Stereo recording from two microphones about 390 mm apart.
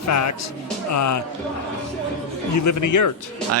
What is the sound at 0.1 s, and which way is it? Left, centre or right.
Speech, left.